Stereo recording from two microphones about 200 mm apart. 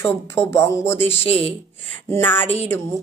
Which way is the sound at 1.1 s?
30° left (ahead or behind).